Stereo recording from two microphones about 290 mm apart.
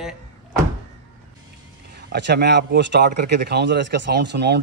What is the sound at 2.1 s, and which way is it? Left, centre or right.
Speech, right.